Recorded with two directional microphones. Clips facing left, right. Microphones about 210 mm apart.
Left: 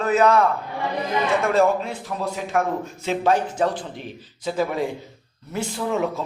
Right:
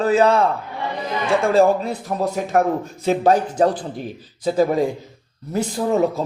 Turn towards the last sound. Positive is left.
turn(degrees=-40)  # may be behind; listen again after turning